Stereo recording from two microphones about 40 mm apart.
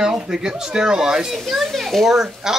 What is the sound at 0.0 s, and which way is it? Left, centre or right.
Speech, centre.